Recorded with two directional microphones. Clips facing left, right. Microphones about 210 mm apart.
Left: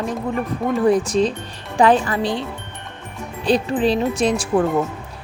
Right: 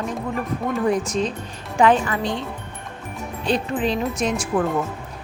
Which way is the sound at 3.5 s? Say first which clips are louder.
Left 5 dB; 35° left (ahead or behind).